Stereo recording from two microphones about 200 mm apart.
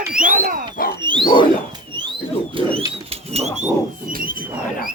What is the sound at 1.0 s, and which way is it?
Wild animals, 25° right (ahead or behind).